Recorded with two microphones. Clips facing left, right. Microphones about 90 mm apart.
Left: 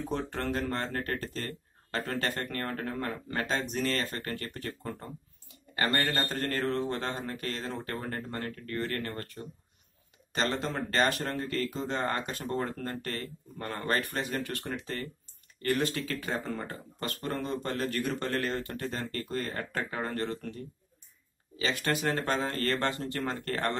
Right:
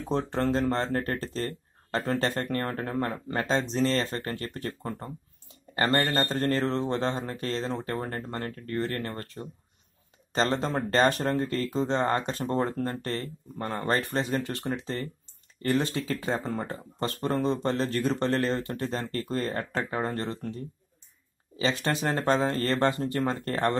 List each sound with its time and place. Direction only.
0.1 s speech: 25° right (ahead or behind)
5.5 s a sound: 25° right (ahead or behind)
6.0 s speech: 35° right (ahead or behind)
6.3 s speech: 25° right (ahead or behind)
21.5 s speech: 25° right (ahead or behind)